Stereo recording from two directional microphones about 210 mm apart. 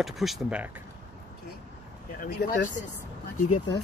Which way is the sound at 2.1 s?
40° left (ahead or behind).